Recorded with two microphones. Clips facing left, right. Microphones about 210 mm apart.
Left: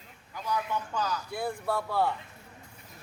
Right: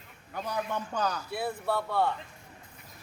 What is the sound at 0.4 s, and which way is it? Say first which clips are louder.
Speech: left 2 dB; 60° right (ahead or behind).